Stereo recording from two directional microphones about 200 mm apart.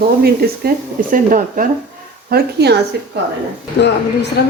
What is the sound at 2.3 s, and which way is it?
Speech, 55° right (ahead or behind).